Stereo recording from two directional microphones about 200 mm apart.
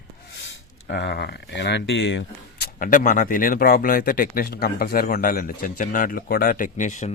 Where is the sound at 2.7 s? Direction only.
40° left (ahead or behind).